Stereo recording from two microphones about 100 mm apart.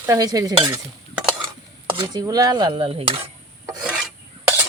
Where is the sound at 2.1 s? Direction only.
35° right (ahead or behind).